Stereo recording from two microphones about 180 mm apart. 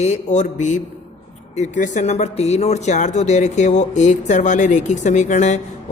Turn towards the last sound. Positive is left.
turn(degrees=40)  # may be behind; listen again after turning